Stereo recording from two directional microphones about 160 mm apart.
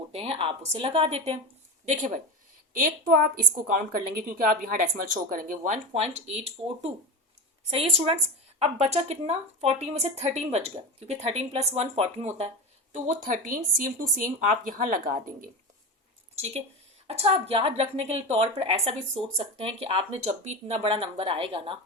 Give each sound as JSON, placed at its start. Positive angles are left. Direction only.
{"t": 0.1, "sound": "a woman's voice", "side_deg": -35}
{"t": 1.8, "sound": "speech", "side_deg": -45}
{"t": 2.7, "sound": "a woman's voice", "side_deg": -60}
{"t": 12.9, "sound": "speech", "side_deg": -50}
{"t": 16.3, "sound": "a woman's voice", "side_deg": -40}